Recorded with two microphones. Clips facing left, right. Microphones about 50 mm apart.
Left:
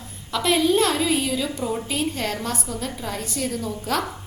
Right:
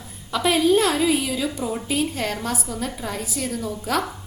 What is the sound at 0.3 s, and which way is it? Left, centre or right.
A woman's voice, centre.